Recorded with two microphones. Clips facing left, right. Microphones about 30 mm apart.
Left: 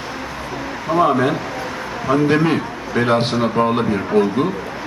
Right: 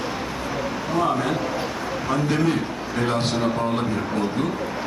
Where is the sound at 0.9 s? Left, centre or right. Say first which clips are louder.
Left 7 dB; left.